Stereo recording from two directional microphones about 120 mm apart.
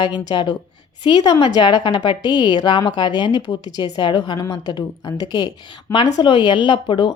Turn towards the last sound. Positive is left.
turn(degrees=40)  # may be behind; listen again after turning